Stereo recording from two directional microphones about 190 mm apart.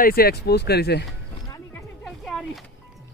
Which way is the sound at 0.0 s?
55° left (ahead or behind).